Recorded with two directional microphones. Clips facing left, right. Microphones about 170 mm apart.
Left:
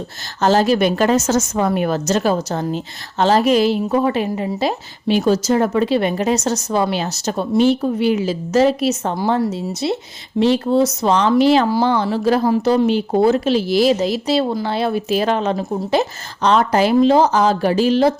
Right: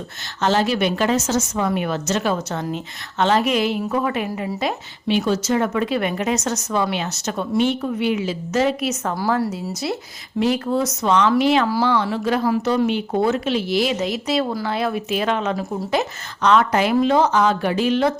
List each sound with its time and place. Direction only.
0.4 s speech: 40° left (ahead or behind)